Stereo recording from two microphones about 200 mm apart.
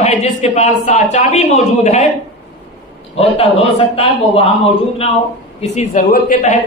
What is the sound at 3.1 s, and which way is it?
A man's voice, 30° left (ahead or behind).